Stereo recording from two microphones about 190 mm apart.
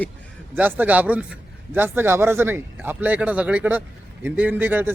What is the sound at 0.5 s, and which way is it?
A man's voice, 10° right (ahead or behind).